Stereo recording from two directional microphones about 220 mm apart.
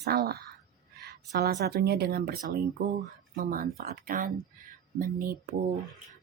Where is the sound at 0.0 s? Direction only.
45° right (ahead or behind).